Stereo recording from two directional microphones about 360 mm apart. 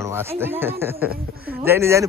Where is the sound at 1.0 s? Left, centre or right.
Right.